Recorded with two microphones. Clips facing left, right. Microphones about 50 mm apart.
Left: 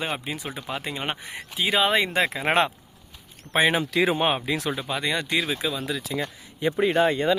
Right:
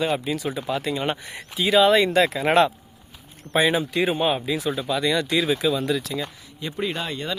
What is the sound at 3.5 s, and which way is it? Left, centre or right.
Speech, left.